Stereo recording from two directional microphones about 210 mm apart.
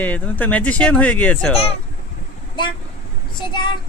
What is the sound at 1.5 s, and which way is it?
Speech, 30° left (ahead or behind).